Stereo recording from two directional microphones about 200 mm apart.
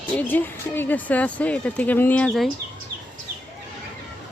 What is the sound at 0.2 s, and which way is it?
Speech, 10° left (ahead or behind).